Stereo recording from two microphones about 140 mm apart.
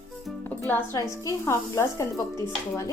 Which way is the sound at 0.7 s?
20° left (ahead or behind).